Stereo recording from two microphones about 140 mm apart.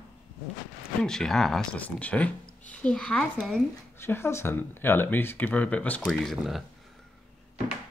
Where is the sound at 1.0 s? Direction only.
5° left (ahead or behind).